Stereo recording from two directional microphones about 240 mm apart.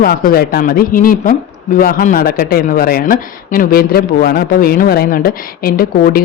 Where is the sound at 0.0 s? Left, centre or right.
Left.